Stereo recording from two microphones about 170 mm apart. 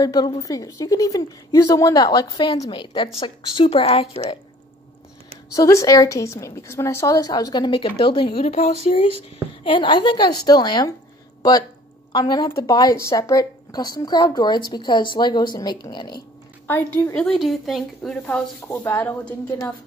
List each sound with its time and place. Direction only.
0.0 s a woman's voice: 20° left (ahead or behind)
5.5 s a woman's voice: 20° left (ahead or behind); by 8.7 s 40° left (ahead or behind)
9.6 s a woman's voice: 30° left (ahead or behind)
12.1 s a woman's voice: 25° left (ahead or behind)
16.6 s speech: 10° left (ahead or behind)